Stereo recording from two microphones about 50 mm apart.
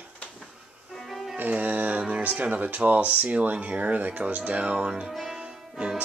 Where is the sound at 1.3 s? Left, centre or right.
Right; by 5.4 s centre.